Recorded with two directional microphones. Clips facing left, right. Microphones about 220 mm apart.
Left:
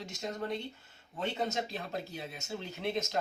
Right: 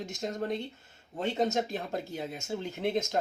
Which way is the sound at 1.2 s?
50° right (ahead or behind).